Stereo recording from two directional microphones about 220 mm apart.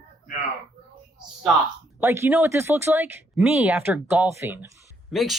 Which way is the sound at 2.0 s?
10° right (ahead or behind).